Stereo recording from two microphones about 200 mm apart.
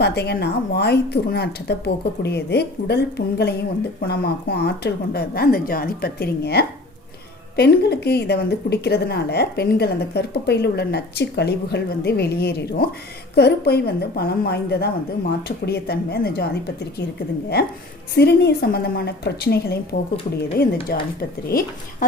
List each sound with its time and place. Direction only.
0.0 s a woman's voice: 55° left (ahead or behind)
18.1 s a woman's voice: 55° left (ahead or behind)